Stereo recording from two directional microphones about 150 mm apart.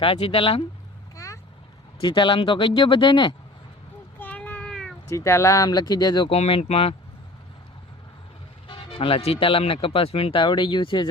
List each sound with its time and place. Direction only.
0.0 s speech: 35° left (ahead or behind)
1.1 s vehicle: 20° left (ahead or behind)
2.0 s speech: 30° left (ahead or behind)
4.2 s child singing: 10° left (ahead or behind)
5.0 s speech: 20° left (ahead or behind)
6.3 s speech: 45° left (ahead or behind)
8.6 s speech: 40° left (ahead or behind)